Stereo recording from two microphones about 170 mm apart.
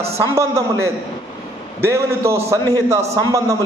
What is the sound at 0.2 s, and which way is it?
A man's voice, 15° right (ahead or behind).